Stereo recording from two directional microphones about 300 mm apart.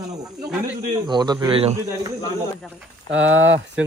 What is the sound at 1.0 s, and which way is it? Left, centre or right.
Speech, centre.